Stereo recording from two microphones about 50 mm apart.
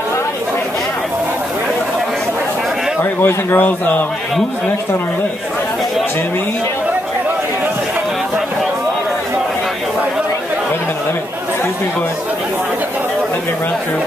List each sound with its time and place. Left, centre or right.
3.0 s speech: left
3.6 s a man's voice: left